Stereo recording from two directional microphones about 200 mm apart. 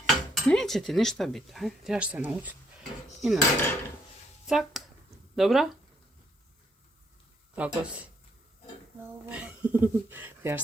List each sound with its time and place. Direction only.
0.0 s speech: centre (ahead or behind)
4.4 s speech: centre (ahead or behind)
7.5 s speech: 5° right (ahead or behind)
9.3 s speech: 5° right (ahead or behind)